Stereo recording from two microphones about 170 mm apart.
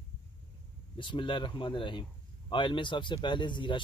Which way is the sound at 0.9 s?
30° left (ahead or behind).